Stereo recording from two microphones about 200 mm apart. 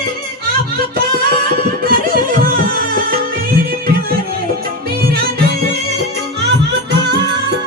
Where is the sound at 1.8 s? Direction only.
45° right (ahead or behind).